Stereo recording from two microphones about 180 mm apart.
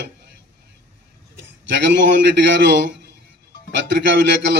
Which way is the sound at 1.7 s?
75° right (ahead or behind).